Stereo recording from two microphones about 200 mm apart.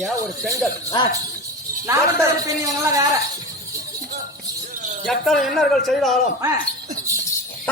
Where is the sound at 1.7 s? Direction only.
45° right (ahead or behind).